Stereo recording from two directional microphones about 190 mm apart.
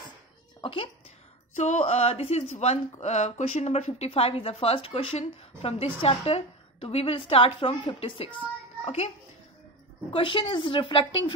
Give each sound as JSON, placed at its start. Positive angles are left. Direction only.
{"t": 0.6, "sound": "a sound", "side_deg": 25}
{"t": 1.6, "sound": "a woman's voice", "side_deg": 40}
{"t": 10.1, "sound": "a woman's voice", "side_deg": 25}